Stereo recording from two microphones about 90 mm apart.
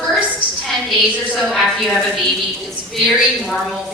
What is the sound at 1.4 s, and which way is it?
A woman's voice, 5° right (ahead or behind).